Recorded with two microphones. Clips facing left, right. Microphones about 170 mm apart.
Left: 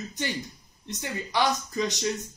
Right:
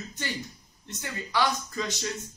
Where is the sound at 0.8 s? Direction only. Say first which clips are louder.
Left 3 dB; 20° left (ahead or behind).